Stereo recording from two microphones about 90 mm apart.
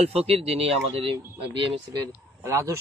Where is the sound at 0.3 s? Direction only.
90° right.